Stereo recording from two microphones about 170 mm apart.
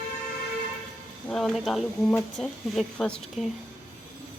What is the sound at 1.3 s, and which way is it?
Speech, centre (ahead or behind).